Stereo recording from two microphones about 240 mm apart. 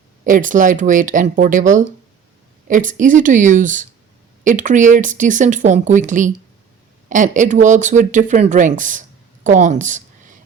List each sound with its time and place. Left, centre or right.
0.3 s speech: right